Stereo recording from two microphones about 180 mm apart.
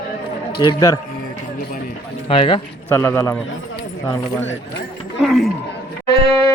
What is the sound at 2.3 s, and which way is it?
Speech, 30° left (ahead or behind).